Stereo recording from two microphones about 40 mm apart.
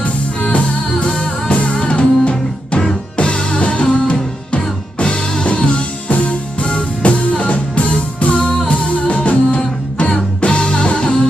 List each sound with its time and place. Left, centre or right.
0.0 s music: left